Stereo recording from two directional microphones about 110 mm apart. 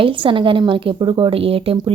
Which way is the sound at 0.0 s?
50° right (ahead or behind).